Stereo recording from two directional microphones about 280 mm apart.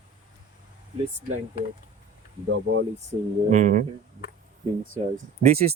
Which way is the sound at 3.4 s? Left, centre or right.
Right.